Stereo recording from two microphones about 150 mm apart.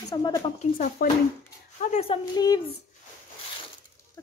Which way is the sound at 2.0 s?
25° left (ahead or behind).